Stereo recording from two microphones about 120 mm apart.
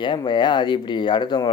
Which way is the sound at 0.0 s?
40° left (ahead or behind).